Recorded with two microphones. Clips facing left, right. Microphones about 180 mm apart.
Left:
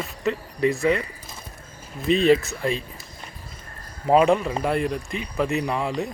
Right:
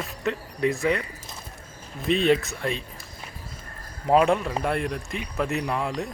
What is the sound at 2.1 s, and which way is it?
Speech, centre (ahead or behind).